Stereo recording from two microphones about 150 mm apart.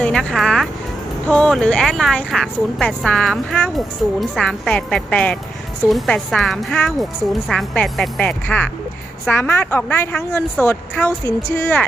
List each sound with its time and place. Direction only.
0.0 s music: 5° left (ahead or behind)
1.3 s a woman's voice: 5° left (ahead or behind)